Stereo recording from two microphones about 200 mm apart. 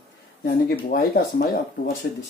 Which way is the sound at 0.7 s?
50° left (ahead or behind).